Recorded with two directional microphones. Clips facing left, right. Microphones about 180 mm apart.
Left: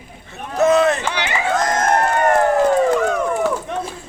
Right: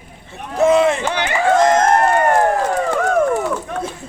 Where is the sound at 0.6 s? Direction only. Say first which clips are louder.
Right 1 dB; 30° right (ahead or behind).